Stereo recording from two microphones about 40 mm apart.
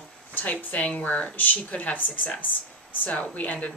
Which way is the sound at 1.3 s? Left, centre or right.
Left.